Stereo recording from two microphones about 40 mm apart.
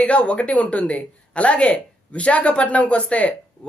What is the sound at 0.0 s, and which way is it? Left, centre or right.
Speech, left.